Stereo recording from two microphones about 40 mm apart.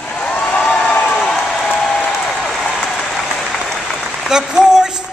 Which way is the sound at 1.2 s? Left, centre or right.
Centre.